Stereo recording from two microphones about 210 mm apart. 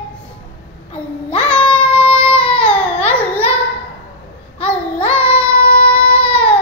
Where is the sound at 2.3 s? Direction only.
25° left (ahead or behind).